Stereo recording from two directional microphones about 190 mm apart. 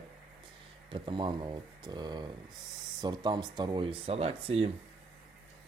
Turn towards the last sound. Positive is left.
turn(degrees=-30)  # may be behind; listen again after turning